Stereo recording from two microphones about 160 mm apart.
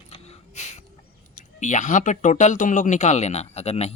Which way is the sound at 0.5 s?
45° left (ahead or behind).